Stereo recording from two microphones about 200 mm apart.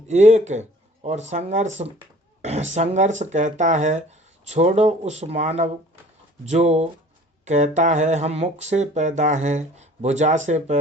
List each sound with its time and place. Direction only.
0.1 s speech: 35° right (ahead or behind)